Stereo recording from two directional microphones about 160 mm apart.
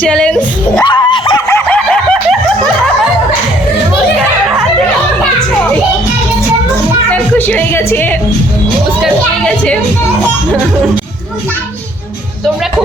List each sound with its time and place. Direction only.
0.0 s speech: 5° left (ahead or behind)
0.9 s dog: 30° left (ahead or behind)
1.5 s dog: 10° left (ahead or behind)
7.1 s speech: 10° left (ahead or behind)